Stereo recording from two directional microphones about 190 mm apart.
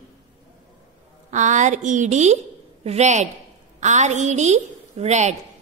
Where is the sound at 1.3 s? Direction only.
40° right (ahead or behind).